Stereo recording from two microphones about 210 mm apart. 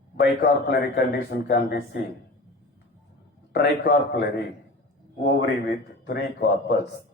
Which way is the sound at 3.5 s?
50° left (ahead or behind).